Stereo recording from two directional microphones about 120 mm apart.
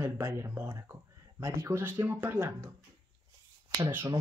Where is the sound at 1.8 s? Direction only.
15° right (ahead or behind).